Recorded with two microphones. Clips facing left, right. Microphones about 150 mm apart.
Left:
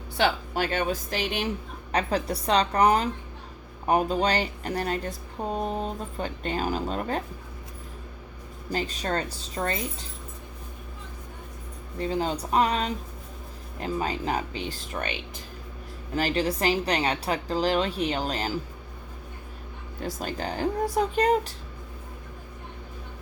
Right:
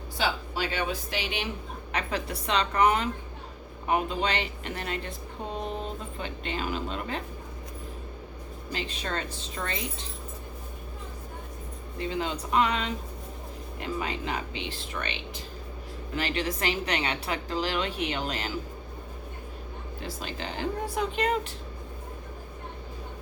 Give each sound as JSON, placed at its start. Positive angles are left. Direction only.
{"t": 0.2, "sound": "a woman's voice", "side_deg": 50}
{"t": 8.7, "sound": "a woman's voice", "side_deg": 40}
{"t": 11.9, "sound": "a woman's voice", "side_deg": 35}
{"t": 16.1, "sound": "a woman's voice", "side_deg": 40}
{"t": 20.0, "sound": "a woman's voice", "side_deg": 45}